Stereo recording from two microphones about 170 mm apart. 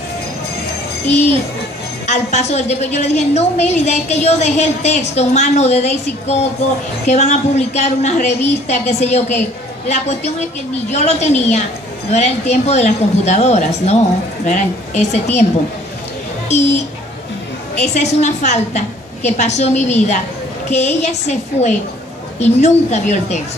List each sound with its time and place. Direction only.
1.0 s a child's voice: 40° left (ahead or behind)
16.4 s a woman's voice: 40° left (ahead or behind)